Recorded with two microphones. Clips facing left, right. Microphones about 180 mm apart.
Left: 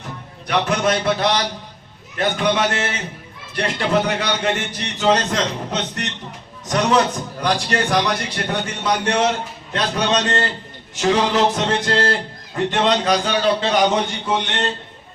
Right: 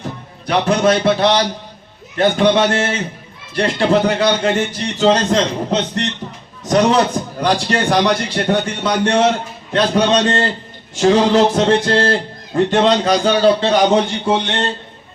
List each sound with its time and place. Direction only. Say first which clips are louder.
0.0 s a man's voice: right 6 dB; 30° right (ahead or behind)